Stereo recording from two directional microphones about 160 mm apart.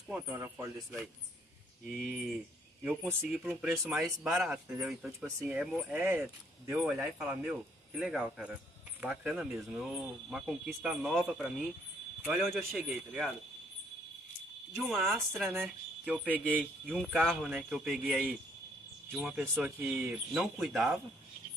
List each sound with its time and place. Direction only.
0.1 s speech: 15° right (ahead or behind)
1.9 s speech: 10° right (ahead or behind)
5.2 s speech: 15° right (ahead or behind)
5.6 s speech: 5° right (ahead or behind)
12.7 s speech: 10° right (ahead or behind)
14.9 s speech: centre (ahead or behind)
16.9 s speech: centre (ahead or behind)